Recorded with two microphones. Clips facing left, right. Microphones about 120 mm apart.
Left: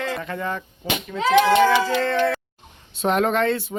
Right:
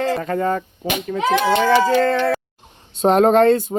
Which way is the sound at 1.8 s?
40° right (ahead or behind).